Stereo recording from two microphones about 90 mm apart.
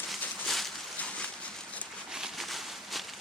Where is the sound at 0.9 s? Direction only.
15° left (ahead or behind).